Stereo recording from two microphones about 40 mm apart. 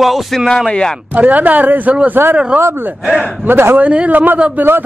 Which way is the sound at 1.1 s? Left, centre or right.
Right.